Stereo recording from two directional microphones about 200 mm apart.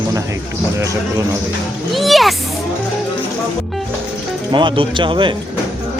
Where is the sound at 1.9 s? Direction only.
Centre (ahead or behind).